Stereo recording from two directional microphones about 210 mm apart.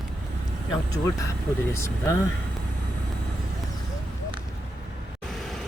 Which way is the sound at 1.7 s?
15° left (ahead or behind).